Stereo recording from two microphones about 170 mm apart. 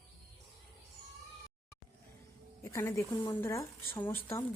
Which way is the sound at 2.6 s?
15° left (ahead or behind).